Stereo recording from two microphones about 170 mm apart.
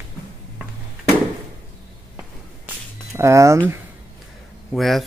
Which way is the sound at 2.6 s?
15° right (ahead or behind).